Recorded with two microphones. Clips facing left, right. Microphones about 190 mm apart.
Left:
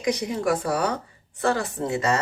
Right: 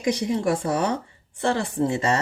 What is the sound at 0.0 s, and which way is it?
Speech, 30° right (ahead or behind).